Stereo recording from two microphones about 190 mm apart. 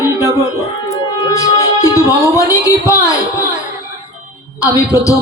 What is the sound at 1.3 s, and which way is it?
Speech, 15° left (ahead or behind).